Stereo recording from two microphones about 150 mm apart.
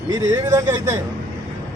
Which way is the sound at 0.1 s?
20° right (ahead or behind).